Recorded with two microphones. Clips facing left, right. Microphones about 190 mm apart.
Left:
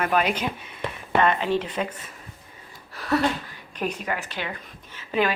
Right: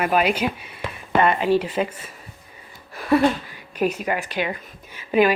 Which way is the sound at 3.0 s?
10° right (ahead or behind).